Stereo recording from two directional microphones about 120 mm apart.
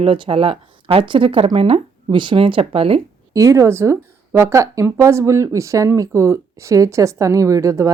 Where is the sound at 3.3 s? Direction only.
25° right (ahead or behind).